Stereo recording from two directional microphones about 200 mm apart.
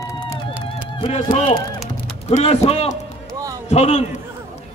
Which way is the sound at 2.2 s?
30° left (ahead or behind).